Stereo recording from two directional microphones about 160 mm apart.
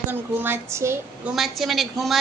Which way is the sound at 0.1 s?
10° right (ahead or behind).